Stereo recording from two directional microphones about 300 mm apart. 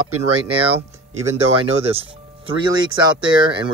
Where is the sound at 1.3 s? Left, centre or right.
Centre.